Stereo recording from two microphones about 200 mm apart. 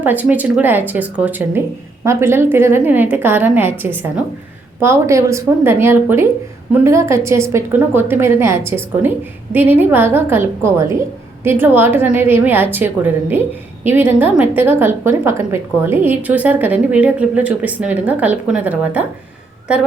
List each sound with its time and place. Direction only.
0.0 s a woman's voice: 10° right (ahead or behind)